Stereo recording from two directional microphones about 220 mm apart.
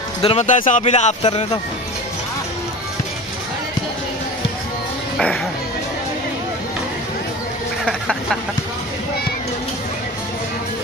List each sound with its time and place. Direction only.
0.2 s speech: 30° left (ahead or behind)
1.2 s speech: 20° left (ahead or behind)